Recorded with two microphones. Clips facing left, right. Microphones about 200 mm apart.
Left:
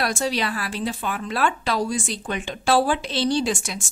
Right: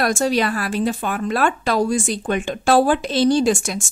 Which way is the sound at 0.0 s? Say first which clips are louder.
Right 6 dB; 45° right (ahead or behind).